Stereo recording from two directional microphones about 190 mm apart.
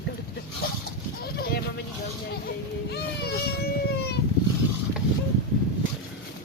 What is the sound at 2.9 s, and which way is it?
Baby cry, 60° left (ahead or behind).